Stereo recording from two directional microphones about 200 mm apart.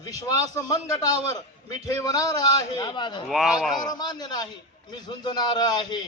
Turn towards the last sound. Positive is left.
turn(degrees=20)  # may be behind; listen again after turning